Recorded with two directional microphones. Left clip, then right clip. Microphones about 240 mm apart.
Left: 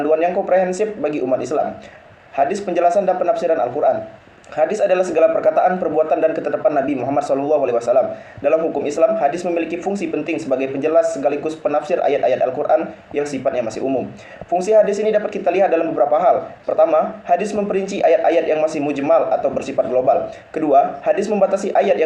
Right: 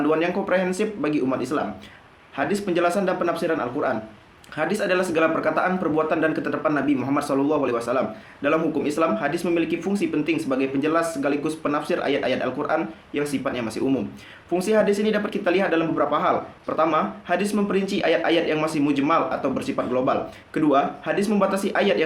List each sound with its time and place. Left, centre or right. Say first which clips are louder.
0.1 s speech: left 9 dB; right